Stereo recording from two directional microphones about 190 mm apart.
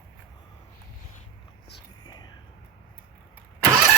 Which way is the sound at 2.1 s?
20° left (ahead or behind).